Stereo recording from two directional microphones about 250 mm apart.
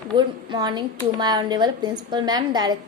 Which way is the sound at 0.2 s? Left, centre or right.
Centre.